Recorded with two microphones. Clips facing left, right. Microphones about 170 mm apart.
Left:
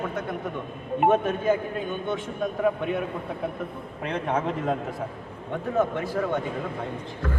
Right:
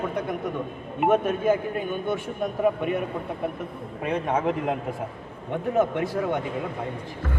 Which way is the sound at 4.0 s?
10° right (ahead or behind).